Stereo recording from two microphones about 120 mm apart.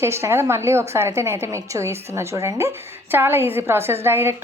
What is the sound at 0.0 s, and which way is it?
A woman's voice, 20° right (ahead or behind).